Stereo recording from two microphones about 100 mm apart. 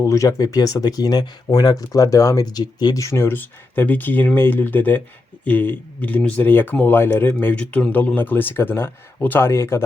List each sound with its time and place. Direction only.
0.0 s speech: 35° left (ahead or behind)